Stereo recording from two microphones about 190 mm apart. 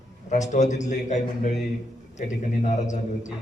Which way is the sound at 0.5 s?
40° left (ahead or behind).